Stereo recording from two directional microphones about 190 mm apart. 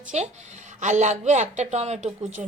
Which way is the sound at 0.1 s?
35° right (ahead or behind).